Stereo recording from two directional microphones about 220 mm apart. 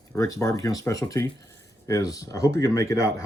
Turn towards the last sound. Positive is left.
turn(degrees=15)  # may be behind; listen again after turning